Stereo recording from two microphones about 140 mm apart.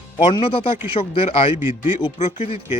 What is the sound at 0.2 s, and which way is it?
A man's voice, 40° left (ahead or behind).